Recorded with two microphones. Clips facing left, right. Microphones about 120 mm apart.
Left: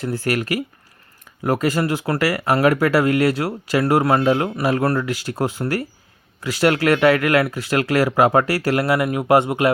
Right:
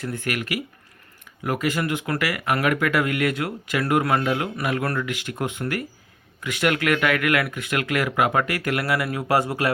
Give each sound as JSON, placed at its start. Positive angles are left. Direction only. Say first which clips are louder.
{"t": 0.0, "sound": "speech", "louder": "left 6 dB", "side_deg": 35}